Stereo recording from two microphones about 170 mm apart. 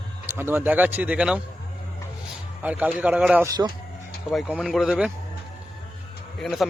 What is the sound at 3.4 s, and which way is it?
Speech, 25° right (ahead or behind).